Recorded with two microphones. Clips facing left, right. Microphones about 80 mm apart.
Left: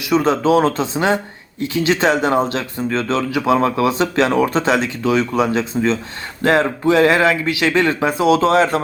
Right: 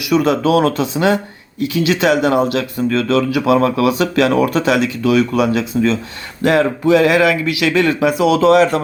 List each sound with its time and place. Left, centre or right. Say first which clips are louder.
0.0 s speech: right 1 dB; left